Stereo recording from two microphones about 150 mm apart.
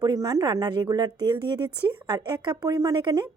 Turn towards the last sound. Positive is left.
turn(degrees=-30)  # may be behind; listen again after turning